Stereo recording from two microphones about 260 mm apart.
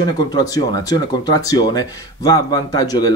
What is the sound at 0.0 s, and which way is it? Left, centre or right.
Speech, centre.